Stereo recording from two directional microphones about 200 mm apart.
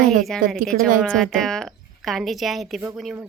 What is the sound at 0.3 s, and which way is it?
A woman's voice, centre (ahead or behind).